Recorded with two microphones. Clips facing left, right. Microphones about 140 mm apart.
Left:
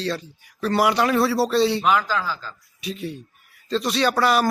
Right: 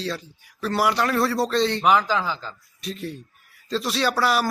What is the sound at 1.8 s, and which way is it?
Speech, 15° right (ahead or behind).